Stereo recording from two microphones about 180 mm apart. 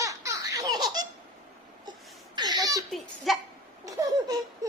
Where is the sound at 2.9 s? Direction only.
Centre (ahead or behind).